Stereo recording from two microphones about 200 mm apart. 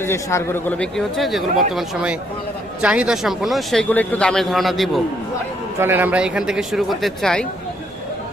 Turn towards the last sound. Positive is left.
turn(degrees=0)  # may be behind; listen again after turning